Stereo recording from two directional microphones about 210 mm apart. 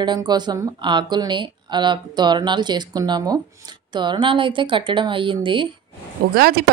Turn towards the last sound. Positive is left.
turn(degrees=-45)  # may be behind; listen again after turning